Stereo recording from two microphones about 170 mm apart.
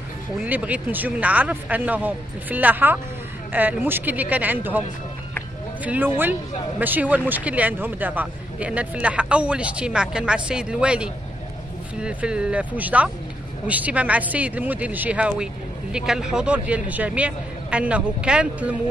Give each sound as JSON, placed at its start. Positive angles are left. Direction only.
{"t": 0.4, "sound": "speech", "side_deg": -10}
{"t": 5.9, "sound": "speech", "side_deg": -10}